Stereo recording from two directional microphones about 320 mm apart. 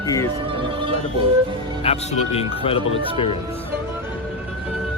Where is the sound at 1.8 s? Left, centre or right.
Centre.